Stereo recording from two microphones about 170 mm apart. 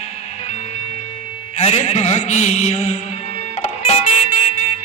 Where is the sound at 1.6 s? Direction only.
40° left (ahead or behind).